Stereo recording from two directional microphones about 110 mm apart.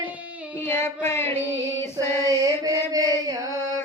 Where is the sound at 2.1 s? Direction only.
35° right (ahead or behind).